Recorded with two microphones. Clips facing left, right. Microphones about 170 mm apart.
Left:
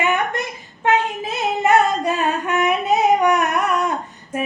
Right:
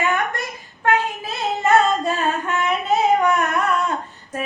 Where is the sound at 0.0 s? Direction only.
20° left (ahead or behind).